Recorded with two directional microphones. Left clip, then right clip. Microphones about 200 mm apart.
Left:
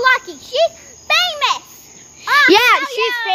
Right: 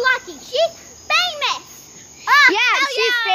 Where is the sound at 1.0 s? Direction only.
40° left (ahead or behind).